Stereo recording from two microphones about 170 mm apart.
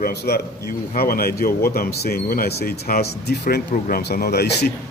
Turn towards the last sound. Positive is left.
turn(degrees=75)  # may be behind; listen again after turning